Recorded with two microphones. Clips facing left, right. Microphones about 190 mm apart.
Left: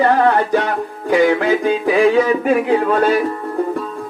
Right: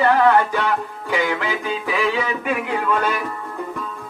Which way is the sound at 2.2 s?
35° left (ahead or behind).